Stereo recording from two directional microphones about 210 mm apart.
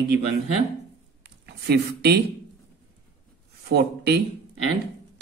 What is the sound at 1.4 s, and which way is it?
Speech, 55° right (ahead or behind).